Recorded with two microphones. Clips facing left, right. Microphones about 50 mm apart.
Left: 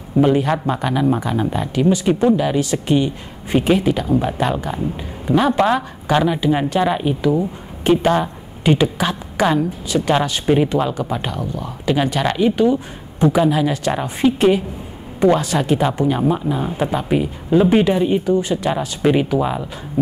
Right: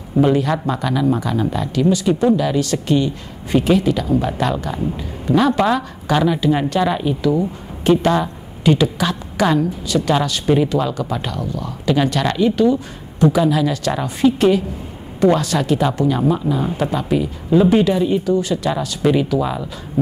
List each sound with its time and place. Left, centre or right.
0.2 s speech: centre